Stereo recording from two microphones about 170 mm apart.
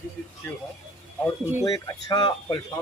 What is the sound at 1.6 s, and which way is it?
Speech, 20° left (ahead or behind).